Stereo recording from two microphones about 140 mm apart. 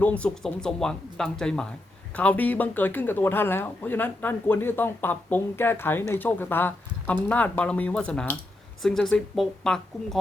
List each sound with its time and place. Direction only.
0.0 s speech: 10° left (ahead or behind)